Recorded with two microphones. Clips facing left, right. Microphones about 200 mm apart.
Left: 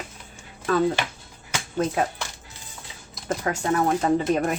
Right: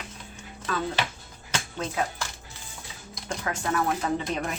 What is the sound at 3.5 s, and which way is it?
Speech, 35° left (ahead or behind).